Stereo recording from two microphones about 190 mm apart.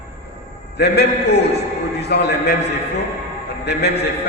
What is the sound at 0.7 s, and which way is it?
A man's voice, 60° left (ahead or behind).